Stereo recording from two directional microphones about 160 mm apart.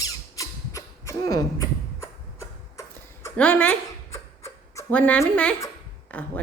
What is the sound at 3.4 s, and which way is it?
Speech, 5° left (ahead or behind).